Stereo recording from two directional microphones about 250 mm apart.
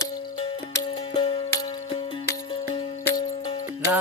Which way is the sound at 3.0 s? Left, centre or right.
Centre.